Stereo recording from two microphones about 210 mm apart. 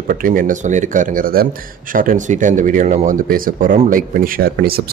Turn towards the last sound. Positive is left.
turn(degrees=-45)  # may be behind; listen again after turning